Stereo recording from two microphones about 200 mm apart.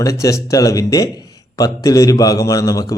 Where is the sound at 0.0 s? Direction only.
15° left (ahead or behind).